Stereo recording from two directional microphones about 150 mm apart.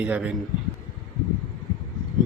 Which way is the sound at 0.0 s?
10° right (ahead or behind).